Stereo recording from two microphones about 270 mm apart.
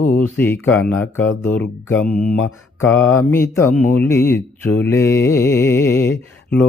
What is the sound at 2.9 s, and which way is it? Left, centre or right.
Speech, centre.